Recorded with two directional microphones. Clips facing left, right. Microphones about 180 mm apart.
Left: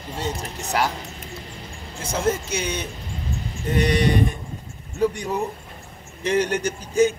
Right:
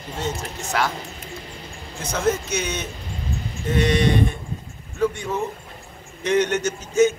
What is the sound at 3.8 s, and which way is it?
Speech, 40° left (ahead or behind).